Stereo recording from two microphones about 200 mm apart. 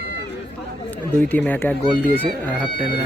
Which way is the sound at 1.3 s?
10° left (ahead or behind).